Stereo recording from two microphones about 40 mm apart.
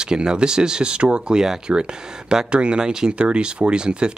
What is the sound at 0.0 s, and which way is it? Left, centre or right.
Speech, centre.